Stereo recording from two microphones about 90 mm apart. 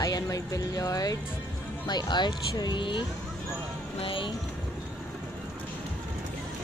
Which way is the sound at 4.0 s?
75° left (ahead or behind).